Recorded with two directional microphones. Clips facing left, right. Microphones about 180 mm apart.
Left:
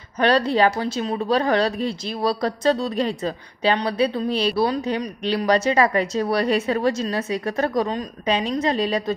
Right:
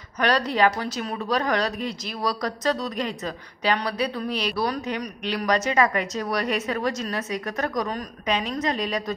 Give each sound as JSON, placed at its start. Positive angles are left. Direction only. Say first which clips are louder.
{"t": 0.2, "sound": "speech", "louder": "left 4 dB", "side_deg": 30}